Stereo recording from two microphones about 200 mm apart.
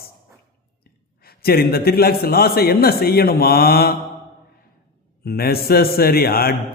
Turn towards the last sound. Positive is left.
turn(degrees=50)  # may be behind; listen again after turning